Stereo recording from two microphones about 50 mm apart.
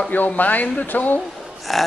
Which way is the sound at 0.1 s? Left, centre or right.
Left.